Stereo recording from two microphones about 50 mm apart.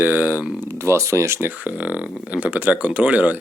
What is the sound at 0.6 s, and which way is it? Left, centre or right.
Speech, right.